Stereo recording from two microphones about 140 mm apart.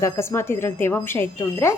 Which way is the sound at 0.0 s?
20° left (ahead or behind).